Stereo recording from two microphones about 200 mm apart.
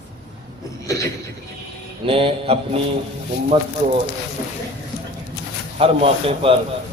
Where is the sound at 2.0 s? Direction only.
25° right (ahead or behind).